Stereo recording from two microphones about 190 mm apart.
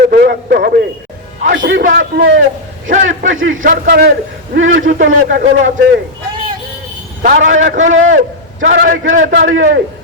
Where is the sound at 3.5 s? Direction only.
45° right (ahead or behind).